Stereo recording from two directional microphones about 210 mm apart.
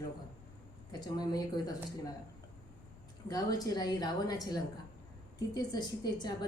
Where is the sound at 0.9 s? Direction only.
20° left (ahead or behind).